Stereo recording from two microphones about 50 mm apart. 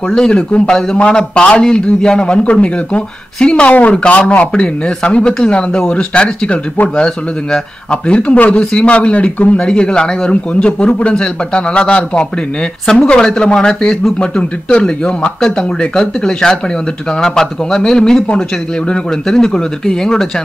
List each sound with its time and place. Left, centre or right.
0.1 s speech: centre
4.1 s speech: left; by 20.2 s centre